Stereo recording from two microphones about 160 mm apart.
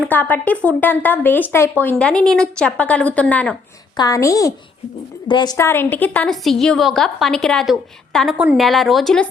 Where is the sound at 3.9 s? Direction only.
20° left (ahead or behind).